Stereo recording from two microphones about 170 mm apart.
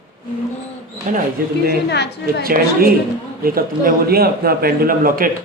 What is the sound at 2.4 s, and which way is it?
A man's voice, 60° right (ahead or behind).